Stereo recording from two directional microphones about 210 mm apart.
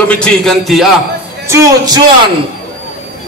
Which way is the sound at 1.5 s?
20° right (ahead or behind).